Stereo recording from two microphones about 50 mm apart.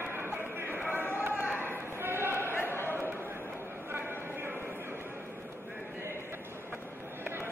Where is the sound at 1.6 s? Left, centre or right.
Right.